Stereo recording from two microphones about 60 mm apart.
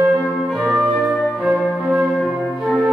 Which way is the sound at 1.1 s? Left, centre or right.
Centre.